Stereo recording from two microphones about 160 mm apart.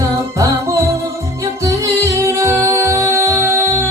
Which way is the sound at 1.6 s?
20° right (ahead or behind).